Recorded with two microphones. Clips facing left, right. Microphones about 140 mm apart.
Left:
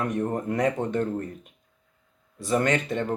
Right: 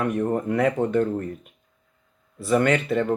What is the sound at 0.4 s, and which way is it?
Speech, 30° left (ahead or behind).